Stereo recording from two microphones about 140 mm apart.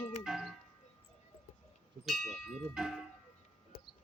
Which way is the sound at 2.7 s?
5° right (ahead or behind).